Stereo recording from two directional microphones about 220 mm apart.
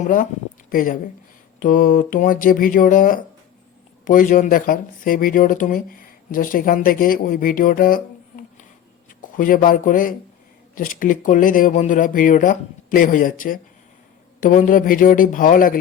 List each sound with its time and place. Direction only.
0.0 s speech: 35° left (ahead or behind)
9.2 s speech: 40° left (ahead or behind)